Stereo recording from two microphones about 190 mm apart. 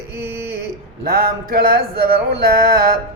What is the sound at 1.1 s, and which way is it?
Speech, 50° right (ahead or behind).